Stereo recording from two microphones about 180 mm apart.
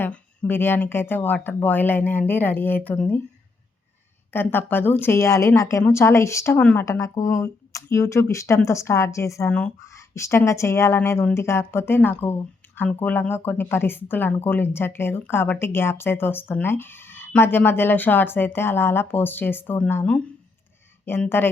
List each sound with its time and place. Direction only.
0.0 s speech: 10° left (ahead or behind)
4.3 s speech: 10° left (ahead or behind)